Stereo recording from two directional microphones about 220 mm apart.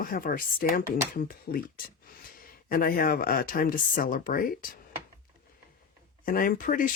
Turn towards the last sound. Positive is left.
turn(degrees=40)  # may be behind; listen again after turning